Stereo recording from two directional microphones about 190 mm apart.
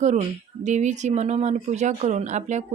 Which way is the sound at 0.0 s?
40° right (ahead or behind).